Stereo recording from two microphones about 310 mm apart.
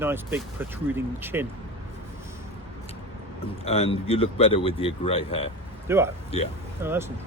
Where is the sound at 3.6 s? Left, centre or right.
Centre.